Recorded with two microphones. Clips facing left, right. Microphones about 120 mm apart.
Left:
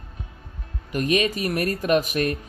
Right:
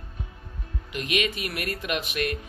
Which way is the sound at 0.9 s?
40° left (ahead or behind).